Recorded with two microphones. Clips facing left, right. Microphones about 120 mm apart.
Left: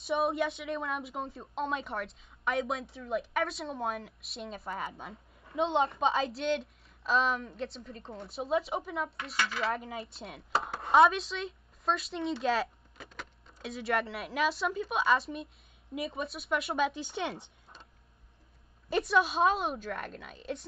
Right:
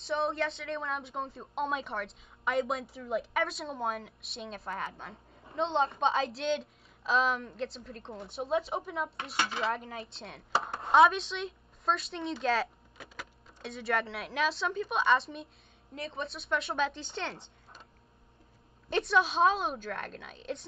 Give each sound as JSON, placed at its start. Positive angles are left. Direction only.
{"t": 0.0, "sound": "a woman's voice", "side_deg": 5}
{"t": 9.4, "sound": "speech", "side_deg": -25}
{"t": 9.7, "sound": "a woman's voice", "side_deg": 0}
{"t": 18.9, "sound": "a woman's voice", "side_deg": 5}